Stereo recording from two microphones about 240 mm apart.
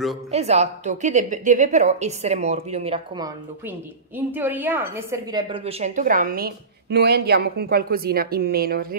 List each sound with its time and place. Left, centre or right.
0.3 s a woman's voice: right